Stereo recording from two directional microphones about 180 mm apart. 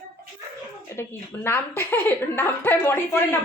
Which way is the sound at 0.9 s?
15° left (ahead or behind).